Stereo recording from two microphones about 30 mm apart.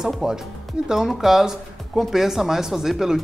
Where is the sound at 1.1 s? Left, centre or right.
Centre.